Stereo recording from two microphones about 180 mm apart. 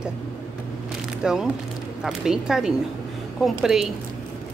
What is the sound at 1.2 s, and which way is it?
A woman's voice, 5° right (ahead or behind).